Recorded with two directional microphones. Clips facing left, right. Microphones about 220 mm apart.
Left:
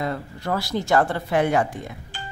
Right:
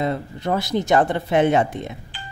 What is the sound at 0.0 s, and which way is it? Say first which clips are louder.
A woman's voice: right 4 dB; 20° right (ahead or behind).